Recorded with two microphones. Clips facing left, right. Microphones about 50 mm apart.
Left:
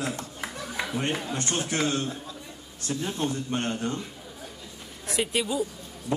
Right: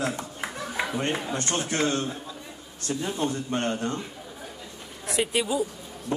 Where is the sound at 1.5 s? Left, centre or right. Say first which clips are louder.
Right 1 dB; right.